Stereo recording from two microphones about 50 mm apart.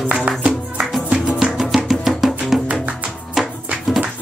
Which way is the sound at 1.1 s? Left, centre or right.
Centre.